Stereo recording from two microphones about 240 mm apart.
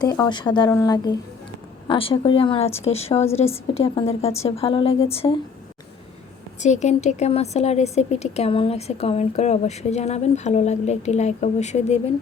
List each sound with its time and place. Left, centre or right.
0.0 s a woman's voice: centre
6.6 s a woman's voice: left